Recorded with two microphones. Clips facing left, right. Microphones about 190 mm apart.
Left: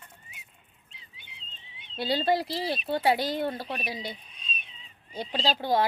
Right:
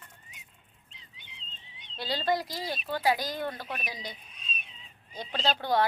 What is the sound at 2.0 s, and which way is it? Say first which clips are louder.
Speech: left 4 dB; 25° left (ahead or behind).